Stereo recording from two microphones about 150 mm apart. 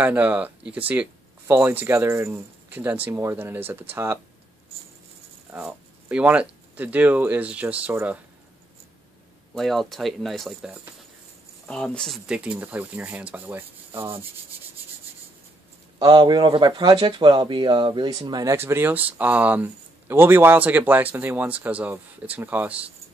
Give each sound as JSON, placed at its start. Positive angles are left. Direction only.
{"t": 0.0, "sound": "speech", "side_deg": -10}
{"t": 5.5, "sound": "speech", "side_deg": -10}
{"t": 9.6, "sound": "speech", "side_deg": 0}
{"t": 12.3, "sound": "speech", "side_deg": -5}
{"t": 16.0, "sound": "speech", "side_deg": -25}